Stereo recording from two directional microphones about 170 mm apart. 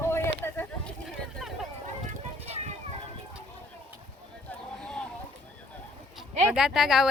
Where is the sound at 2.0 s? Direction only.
40° right (ahead or behind).